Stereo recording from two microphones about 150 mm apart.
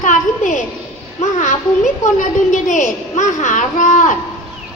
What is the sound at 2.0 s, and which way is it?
A child's voice, 55° left (ahead or behind).